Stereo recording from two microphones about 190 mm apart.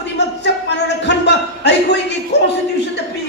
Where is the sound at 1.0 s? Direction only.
65° left (ahead or behind).